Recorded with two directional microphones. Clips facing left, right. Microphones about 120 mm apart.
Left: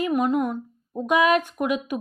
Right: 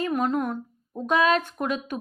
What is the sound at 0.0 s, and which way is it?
A woman's voice, 10° left (ahead or behind).